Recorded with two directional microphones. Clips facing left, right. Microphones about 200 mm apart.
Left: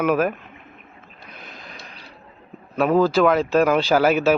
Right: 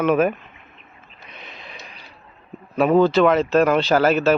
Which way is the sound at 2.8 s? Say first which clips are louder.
Right 2 dB; centre (ahead or behind).